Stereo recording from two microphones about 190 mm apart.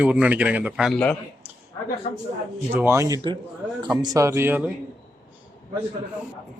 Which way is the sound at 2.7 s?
10° right (ahead or behind).